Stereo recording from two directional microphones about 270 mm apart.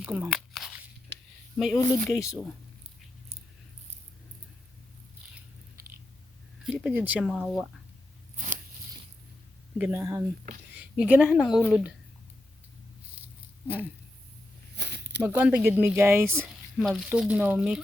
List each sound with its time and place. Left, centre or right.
0.0 s tearing: centre
1.5 s speech: centre
6.7 s speech: centre
9.7 s speech: centre
13.2 s a sound: centre
14.8 s a sound: right
15.2 s speech: centre